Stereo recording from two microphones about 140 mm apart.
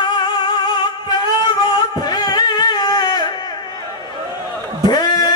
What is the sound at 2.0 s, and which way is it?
Music, 30° left (ahead or behind).